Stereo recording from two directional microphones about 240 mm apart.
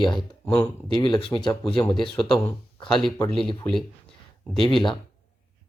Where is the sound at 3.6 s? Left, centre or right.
Centre.